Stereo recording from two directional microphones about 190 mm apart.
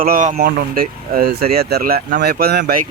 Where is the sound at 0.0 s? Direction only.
45° right (ahead or behind).